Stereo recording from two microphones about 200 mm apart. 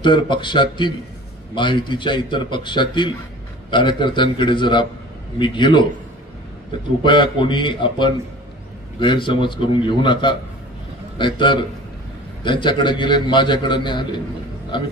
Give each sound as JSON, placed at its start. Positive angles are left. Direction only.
{"t": 0.0, "sound": "a man's voice", "side_deg": 25}
{"t": 7.0, "sound": "a man's voice", "side_deg": 25}